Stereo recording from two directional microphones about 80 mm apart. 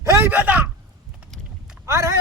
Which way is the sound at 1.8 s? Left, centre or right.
Right.